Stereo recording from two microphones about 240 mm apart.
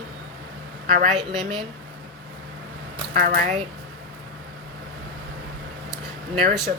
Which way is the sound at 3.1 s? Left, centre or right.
Right.